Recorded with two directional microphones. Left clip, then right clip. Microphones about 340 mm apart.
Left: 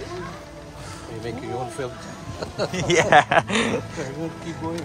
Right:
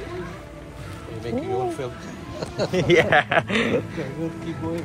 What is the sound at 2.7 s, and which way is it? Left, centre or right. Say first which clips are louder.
Speech: left 1 dB; centre.